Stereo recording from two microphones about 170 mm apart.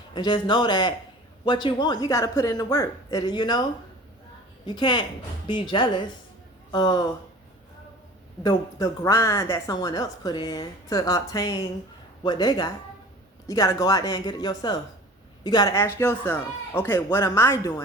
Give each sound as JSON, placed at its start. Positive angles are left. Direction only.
{"t": 0.1, "sound": "speech", "side_deg": 25}
{"t": 8.4, "sound": "speech", "side_deg": 20}